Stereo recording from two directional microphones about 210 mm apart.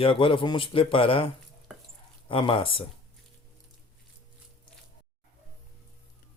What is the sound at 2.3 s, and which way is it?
Speech, 25° left (ahead or behind).